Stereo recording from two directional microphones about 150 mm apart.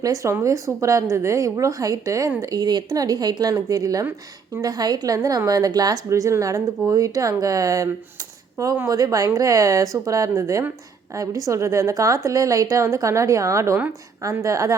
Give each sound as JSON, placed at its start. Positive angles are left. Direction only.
{"t": 0.0, "sound": "a woman's voice", "side_deg": -20}